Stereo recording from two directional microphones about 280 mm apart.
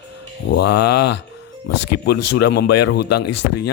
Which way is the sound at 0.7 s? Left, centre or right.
Left.